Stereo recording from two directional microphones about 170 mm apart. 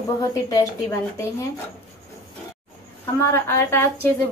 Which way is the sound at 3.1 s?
15° left (ahead or behind).